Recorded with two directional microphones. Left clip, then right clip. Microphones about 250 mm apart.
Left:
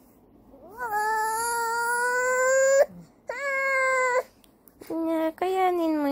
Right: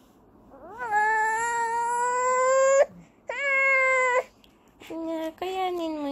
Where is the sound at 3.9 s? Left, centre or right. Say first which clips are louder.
Right 1 dB; centre.